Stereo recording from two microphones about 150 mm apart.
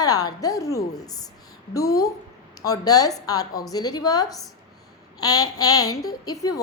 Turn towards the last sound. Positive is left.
turn(degrees=25)  # may be behind; listen again after turning